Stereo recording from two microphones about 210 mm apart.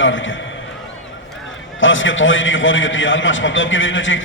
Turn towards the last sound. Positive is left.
turn(degrees=65)  # may be behind; listen again after turning